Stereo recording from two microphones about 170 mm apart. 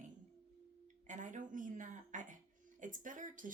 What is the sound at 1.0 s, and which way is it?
A woman's voice, 50° right (ahead or behind).